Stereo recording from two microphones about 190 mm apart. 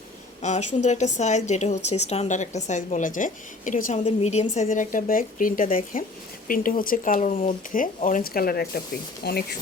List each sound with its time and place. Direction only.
0.4 s a woman's voice: 35° left (ahead or behind); by 9.6 s 55° left (ahead or behind)